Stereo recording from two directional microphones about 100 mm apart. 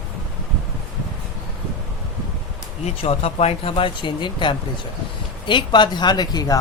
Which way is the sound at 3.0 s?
90° left.